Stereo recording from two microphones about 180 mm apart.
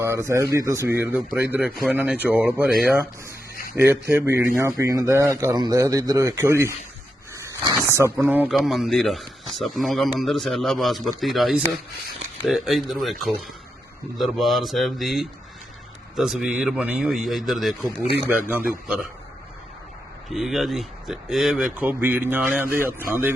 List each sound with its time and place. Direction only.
0.0 s speech: 15° right (ahead or behind)
20.3 s speech: centre (ahead or behind)